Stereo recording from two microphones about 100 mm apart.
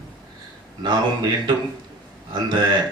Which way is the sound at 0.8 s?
50° right (ahead or behind).